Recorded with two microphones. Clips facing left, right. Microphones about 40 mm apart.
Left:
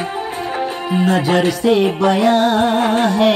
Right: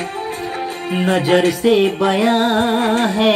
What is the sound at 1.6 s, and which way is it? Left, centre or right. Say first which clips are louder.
Music: even; centre.